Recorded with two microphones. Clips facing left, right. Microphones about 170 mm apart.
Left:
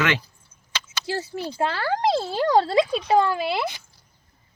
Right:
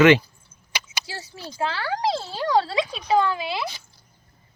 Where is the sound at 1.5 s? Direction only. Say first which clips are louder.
Left 2 dB; 55° left (ahead or behind).